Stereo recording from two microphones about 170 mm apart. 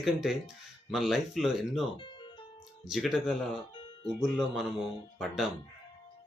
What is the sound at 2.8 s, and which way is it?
Speech, centre (ahead or behind).